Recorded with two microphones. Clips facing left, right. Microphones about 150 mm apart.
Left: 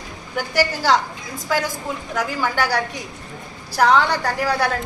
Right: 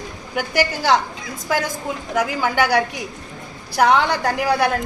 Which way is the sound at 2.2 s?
15° right (ahead or behind).